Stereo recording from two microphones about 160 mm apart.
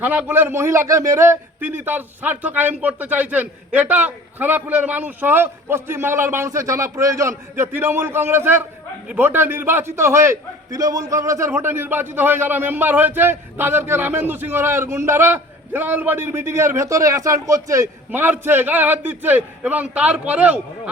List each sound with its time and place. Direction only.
0.0 s speech: 10° right (ahead or behind)